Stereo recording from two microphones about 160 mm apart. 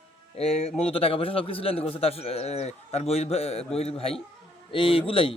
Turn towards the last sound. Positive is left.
turn(degrees=35)  # may be behind; listen again after turning